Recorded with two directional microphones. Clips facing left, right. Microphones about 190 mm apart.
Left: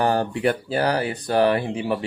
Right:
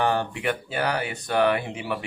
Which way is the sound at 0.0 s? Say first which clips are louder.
Left 4 dB; 40° left (ahead or behind).